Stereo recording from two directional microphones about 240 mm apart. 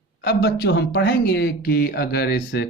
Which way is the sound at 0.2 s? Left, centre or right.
Left.